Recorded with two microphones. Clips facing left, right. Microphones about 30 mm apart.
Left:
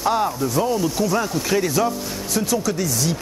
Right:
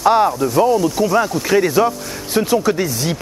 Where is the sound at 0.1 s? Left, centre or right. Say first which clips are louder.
Right 6 dB; right.